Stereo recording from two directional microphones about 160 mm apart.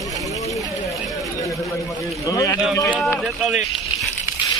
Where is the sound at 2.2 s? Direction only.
20° left (ahead or behind).